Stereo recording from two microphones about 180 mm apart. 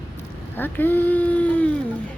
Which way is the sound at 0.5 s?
10° left (ahead or behind).